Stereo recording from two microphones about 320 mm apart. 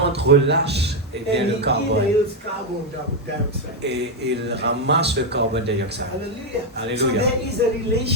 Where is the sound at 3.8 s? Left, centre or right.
Right.